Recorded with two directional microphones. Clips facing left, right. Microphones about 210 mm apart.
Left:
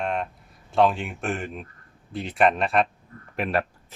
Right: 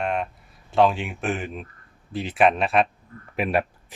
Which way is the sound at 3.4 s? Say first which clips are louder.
Right 2 dB; 15° right (ahead or behind).